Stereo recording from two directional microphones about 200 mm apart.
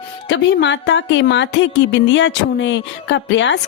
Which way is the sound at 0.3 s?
65° left (ahead or behind).